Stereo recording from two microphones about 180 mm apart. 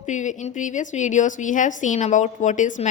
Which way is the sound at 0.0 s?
40° left (ahead or behind).